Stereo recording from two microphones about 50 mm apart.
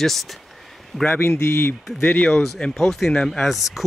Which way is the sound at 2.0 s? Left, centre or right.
Left.